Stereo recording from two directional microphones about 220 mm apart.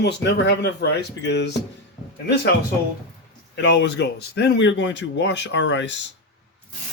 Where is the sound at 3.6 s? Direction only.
55° left (ahead or behind).